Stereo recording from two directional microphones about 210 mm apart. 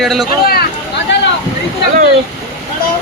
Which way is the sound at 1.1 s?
55° left (ahead or behind).